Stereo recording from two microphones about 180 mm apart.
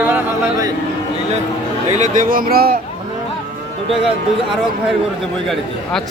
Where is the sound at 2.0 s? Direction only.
50° right (ahead or behind).